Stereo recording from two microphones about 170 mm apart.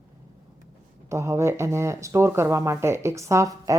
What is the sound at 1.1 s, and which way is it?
Speech, 15° right (ahead or behind).